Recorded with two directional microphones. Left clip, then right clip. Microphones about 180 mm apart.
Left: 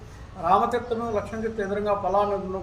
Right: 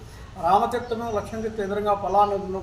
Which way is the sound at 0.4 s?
Centre (ahead or behind).